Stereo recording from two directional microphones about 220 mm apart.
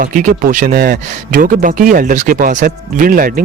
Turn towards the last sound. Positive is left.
turn(degrees=-40)  # may be behind; listen again after turning